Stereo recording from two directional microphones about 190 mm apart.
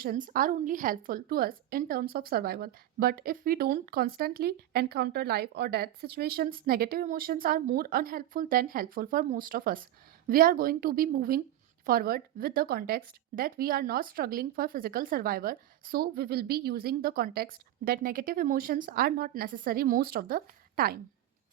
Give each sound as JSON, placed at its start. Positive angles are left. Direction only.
{"t": 0.0, "sound": "a woman's voice", "side_deg": -45}